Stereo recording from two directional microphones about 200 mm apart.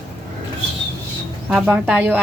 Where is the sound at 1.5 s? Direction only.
5° right (ahead or behind).